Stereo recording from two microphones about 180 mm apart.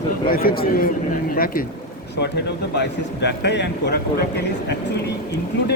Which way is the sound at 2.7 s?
70° left (ahead or behind).